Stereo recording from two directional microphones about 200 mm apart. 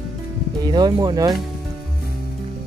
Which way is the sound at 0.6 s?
20° right (ahead or behind).